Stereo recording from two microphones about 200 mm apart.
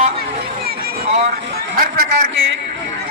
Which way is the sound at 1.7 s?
45° right (ahead or behind).